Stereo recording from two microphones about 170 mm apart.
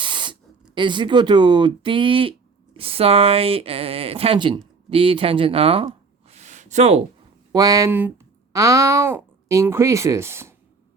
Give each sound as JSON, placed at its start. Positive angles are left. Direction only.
{"t": 0.0, "sound": "speech", "side_deg": -30}
{"t": 7.5, "sound": "speech", "side_deg": -20}